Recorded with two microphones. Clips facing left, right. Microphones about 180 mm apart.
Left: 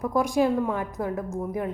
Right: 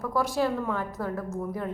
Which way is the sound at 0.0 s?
15° left (ahead or behind).